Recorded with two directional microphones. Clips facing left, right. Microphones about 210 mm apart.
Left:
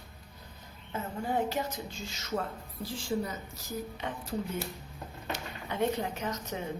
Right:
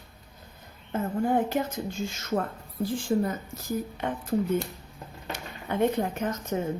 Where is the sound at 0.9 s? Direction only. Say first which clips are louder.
Right 8 dB; 50° right (ahead or behind).